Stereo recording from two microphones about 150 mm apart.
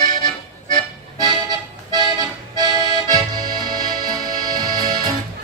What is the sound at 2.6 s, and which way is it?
Accordion, 30° right (ahead or behind).